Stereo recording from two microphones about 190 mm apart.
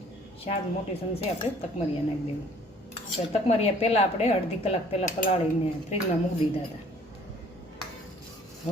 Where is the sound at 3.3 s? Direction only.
30° left (ahead or behind).